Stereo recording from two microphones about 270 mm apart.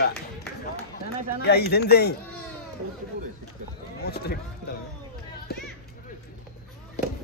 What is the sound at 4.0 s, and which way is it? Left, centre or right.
Run, left.